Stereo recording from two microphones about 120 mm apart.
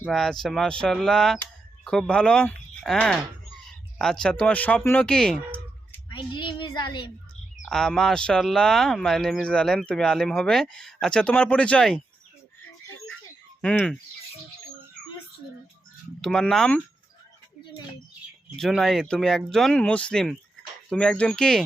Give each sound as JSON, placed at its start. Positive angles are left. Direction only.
{"t": 0.1, "sound": "speech", "side_deg": 0}
{"t": 6.1, "sound": "child singing", "side_deg": 40}
{"t": 7.7, "sound": "speech", "side_deg": 5}
{"t": 13.6, "sound": "speech", "side_deg": 10}
{"t": 16.2, "sound": "speech", "side_deg": 5}
{"t": 18.5, "sound": "speech", "side_deg": 0}